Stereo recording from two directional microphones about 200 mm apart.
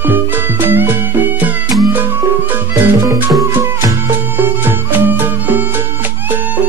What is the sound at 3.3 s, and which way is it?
Music, 15° right (ahead or behind).